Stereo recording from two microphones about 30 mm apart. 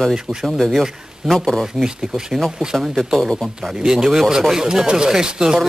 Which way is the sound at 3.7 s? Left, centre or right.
Right.